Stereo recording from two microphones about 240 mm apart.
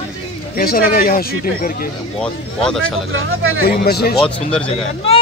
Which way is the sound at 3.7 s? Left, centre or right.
Left.